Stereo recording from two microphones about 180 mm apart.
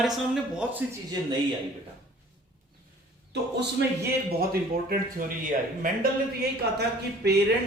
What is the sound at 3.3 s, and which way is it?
Speech, 70° right (ahead or behind).